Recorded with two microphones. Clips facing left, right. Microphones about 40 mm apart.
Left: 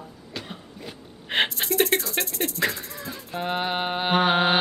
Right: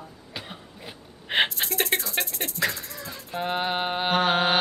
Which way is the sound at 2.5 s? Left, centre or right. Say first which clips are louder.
Right 3 dB; centre.